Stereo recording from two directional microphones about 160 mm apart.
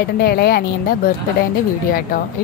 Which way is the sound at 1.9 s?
60° left (ahead or behind).